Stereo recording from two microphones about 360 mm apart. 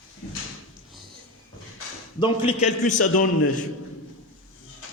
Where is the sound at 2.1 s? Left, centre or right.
Centre.